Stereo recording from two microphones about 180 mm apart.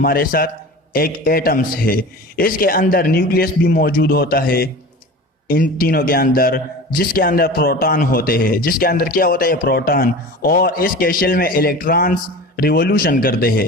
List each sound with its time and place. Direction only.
0.0 s a man's voice: 55° left (ahead or behind)